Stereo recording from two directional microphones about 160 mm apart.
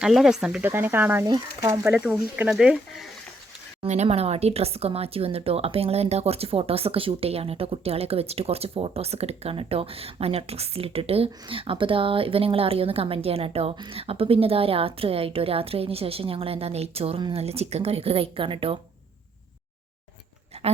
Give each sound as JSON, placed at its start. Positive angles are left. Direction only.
{"t": 0.0, "sound": "speech", "side_deg": 0}
{"t": 3.8, "sound": "speech", "side_deg": -45}